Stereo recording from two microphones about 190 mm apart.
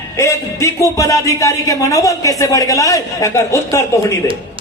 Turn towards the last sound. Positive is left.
turn(degrees=15)  # may be behind; listen again after turning